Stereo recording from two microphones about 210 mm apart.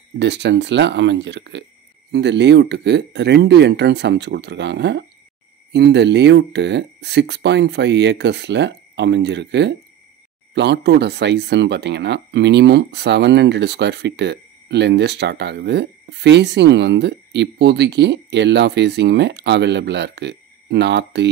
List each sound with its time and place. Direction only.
0.2 s speech: 55° right (ahead or behind)